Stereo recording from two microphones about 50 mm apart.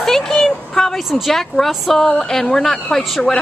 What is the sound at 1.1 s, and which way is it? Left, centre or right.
Speech, centre.